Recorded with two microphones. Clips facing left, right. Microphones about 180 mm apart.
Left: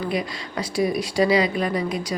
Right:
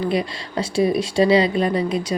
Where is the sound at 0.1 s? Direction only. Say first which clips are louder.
Right 4 dB; 30° right (ahead or behind).